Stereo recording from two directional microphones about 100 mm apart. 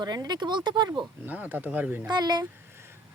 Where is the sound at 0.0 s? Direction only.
45° right (ahead or behind).